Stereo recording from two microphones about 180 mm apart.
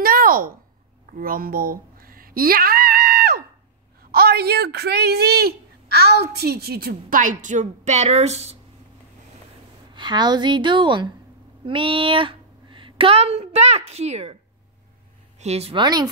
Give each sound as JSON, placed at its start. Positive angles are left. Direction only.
{"t": 0.0, "sound": "a sound", "side_deg": -55}
{"t": 4.1, "sound": "speech", "side_deg": -60}
{"t": 9.9, "sound": "a woman's voice", "side_deg": -25}
{"t": 15.3, "sound": "speech", "side_deg": -35}